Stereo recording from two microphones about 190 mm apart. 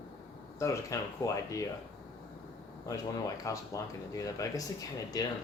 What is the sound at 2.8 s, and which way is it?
Speech, 15° left (ahead or behind).